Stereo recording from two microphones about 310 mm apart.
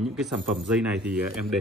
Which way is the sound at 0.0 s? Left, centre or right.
Centre.